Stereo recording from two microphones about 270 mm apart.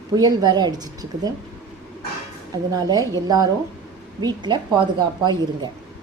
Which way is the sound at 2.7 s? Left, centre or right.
Centre.